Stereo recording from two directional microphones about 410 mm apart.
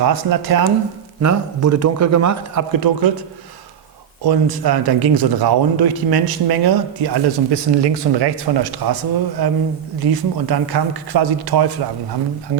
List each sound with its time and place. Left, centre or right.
0.0 s a man's voice: right
4.2 s speech: right